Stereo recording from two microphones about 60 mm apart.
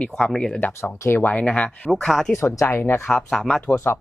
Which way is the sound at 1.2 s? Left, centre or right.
Left.